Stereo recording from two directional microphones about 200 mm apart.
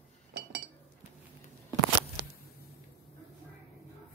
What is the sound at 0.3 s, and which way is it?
Cutlery, 60° right (ahead or behind).